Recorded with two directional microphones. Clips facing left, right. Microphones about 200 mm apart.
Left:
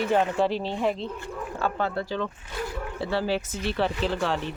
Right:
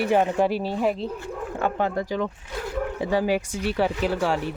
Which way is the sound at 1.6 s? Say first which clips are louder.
Right 3 dB; 15° right (ahead or behind).